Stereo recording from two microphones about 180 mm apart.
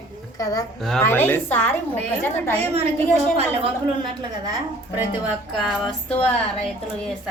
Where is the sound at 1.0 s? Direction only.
10° left (ahead or behind).